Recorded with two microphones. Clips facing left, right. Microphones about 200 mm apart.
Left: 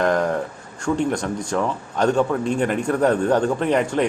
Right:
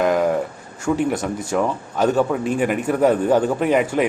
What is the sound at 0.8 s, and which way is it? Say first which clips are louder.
Speech: right 1 dB; 5° right (ahead or behind).